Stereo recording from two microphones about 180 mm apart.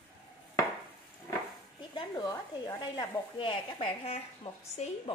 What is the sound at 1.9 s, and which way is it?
Speech, 20° left (ahead or behind).